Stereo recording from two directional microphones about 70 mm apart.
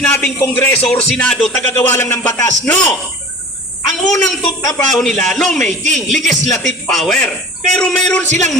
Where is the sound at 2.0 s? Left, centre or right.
Left.